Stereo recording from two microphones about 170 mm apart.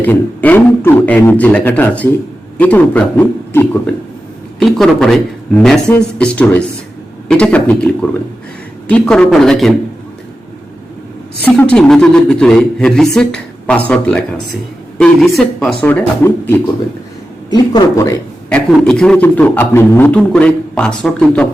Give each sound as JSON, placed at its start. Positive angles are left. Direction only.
{"t": 0.0, "sound": "a man's voice", "side_deg": 10}
{"t": 8.9, "sound": "speech", "side_deg": 5}
{"t": 11.4, "sound": "a man's voice", "side_deg": 5}
{"t": 17.5, "sound": "speech", "side_deg": 20}
{"t": 18.4, "sound": "a man's voice", "side_deg": 5}